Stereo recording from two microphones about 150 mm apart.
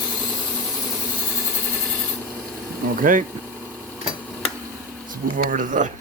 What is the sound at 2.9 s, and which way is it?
Speech, 65° right (ahead or behind).